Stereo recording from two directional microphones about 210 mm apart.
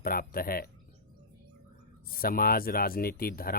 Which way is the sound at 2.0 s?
45° left (ahead or behind).